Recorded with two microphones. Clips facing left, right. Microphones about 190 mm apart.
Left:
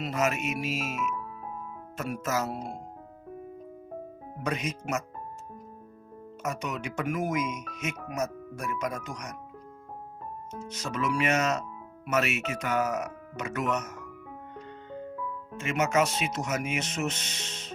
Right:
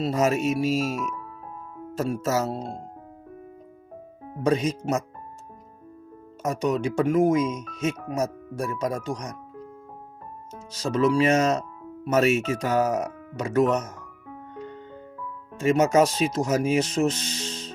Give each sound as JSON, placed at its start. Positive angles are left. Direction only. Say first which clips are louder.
{"t": 0.0, "sound": "speech", "louder": "right 6 dB", "side_deg": -30}
{"t": 4.4, "sound": "speech", "louder": "right 9 dB", "side_deg": -30}
{"t": 6.4, "sound": "speech", "louder": "right 9 dB", "side_deg": -35}
{"t": 10.7, "sound": "speech", "louder": "right 9 dB", "side_deg": -35}
{"t": 15.5, "sound": "speech", "louder": "right 7 dB", "side_deg": -35}